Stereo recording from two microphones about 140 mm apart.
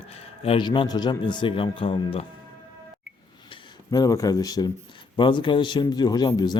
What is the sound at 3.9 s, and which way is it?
Speech, 25° left (ahead or behind).